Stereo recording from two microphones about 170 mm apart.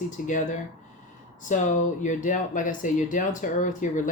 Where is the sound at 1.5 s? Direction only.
50° left (ahead or behind).